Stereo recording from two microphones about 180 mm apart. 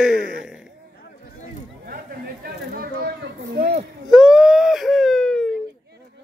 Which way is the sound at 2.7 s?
60° right (ahead or behind).